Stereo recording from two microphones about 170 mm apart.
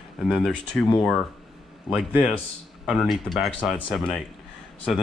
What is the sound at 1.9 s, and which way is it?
Speech, centre (ahead or behind).